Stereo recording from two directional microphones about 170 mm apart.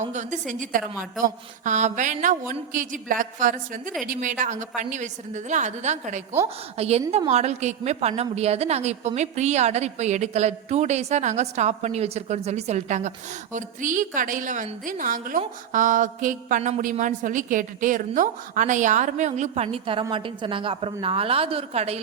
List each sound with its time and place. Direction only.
0.0 s a woman's voice: 45° right (ahead or behind)